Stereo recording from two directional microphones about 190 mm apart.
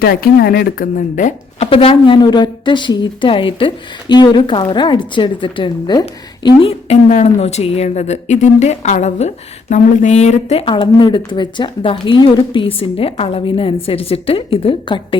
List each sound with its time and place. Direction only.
0.0 s a woman's voice: 55° left (ahead or behind); by 15.2 s 25° left (ahead or behind)